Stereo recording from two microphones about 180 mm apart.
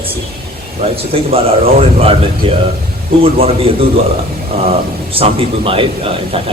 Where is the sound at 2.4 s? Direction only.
30° right (ahead or behind).